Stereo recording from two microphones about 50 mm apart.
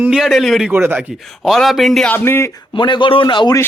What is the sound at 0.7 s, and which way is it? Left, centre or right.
Speech, right.